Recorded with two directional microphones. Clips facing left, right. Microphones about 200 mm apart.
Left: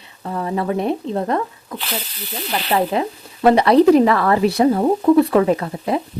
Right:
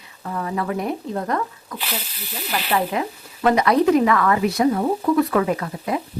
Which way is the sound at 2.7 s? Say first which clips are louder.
Left 4 dB; 30° left (ahead or behind).